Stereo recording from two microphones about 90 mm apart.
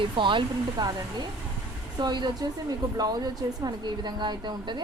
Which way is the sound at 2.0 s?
55° right (ahead or behind).